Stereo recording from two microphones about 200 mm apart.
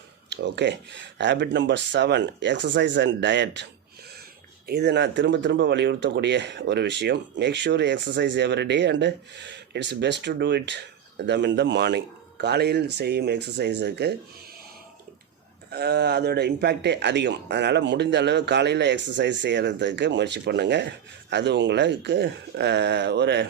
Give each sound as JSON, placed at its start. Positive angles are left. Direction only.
{"t": 0.3, "sound": "speech", "side_deg": -60}
{"t": 15.7, "sound": "speech", "side_deg": -55}